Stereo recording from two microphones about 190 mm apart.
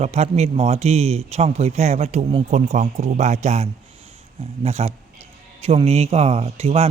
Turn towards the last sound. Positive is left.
turn(degrees=-35)  # may be behind; listen again after turning